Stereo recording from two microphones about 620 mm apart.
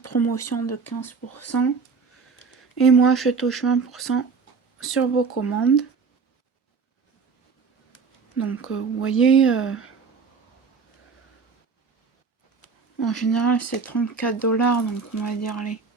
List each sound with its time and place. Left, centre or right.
0.0 s speech: left
2.3 s a sound: left
3.2 s speech: left
8.4 s speech: centre
12.6 s speech: left